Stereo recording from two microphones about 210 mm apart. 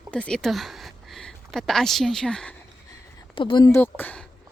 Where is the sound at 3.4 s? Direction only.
20° left (ahead or behind).